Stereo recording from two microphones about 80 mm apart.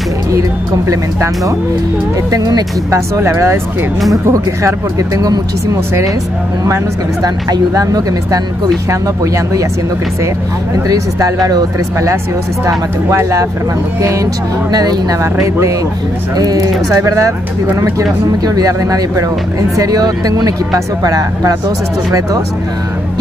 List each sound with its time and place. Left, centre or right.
0.3 s speech: right
3.2 s speech: right
7.2 s speech: right
10.9 s speech: right
14.0 s speech: right
16.3 s speech: right
18.4 s speech: right